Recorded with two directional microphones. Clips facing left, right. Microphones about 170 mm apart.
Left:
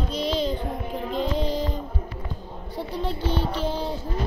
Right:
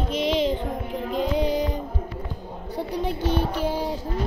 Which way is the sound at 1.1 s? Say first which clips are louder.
Right 3 dB; 15° right (ahead or behind).